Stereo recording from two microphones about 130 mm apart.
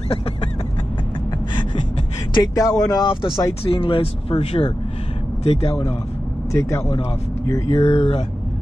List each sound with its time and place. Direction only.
2.3 s speech: 30° left (ahead or behind); by 5.8 s 50° left (ahead or behind)
6.5 s speech: 25° left (ahead or behind)
7.7 s speech: 50° left (ahead or behind)